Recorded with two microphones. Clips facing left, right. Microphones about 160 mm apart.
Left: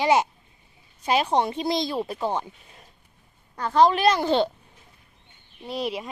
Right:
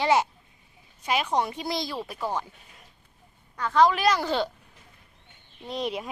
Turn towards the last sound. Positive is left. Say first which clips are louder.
# left 1 dB
turn(degrees=5)  # may be behind; listen again after turning